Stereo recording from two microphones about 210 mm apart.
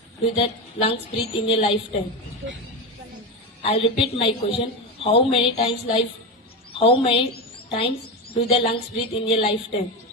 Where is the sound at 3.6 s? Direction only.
30° left (ahead or behind).